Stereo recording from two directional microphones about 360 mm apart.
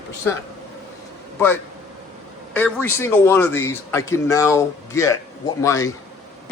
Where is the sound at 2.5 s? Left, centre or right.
Centre.